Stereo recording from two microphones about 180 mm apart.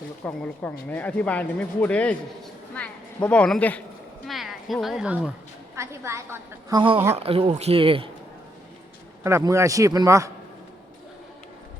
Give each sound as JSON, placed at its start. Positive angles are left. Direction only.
{"t": 0.3, "sound": "a woman's voice", "side_deg": 10}
{"t": 9.2, "sound": "a woman's voice", "side_deg": -15}